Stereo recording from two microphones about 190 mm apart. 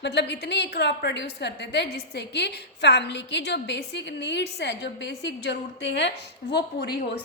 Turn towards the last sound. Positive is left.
turn(degrees=60)  # may be behind; listen again after turning